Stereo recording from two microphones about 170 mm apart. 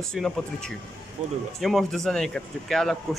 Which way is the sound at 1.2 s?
40° right (ahead or behind).